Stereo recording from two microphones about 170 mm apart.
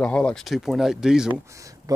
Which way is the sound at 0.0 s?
5° left (ahead or behind).